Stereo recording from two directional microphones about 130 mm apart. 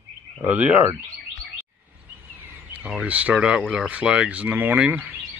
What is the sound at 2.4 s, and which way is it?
Speech, 10° right (ahead or behind).